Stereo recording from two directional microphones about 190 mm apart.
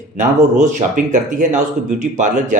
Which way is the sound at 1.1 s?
40° right (ahead or behind).